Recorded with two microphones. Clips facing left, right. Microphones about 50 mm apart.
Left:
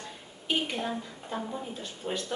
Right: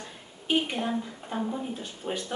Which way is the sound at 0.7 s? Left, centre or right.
Centre.